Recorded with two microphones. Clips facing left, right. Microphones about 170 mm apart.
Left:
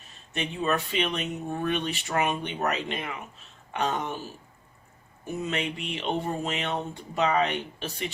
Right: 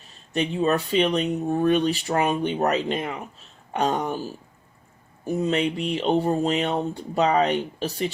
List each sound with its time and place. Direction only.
0.3 s speech: 35° right (ahead or behind)
5.2 s speech: 35° right (ahead or behind)